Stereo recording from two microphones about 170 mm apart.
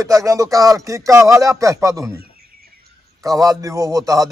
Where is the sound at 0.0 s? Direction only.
20° right (ahead or behind).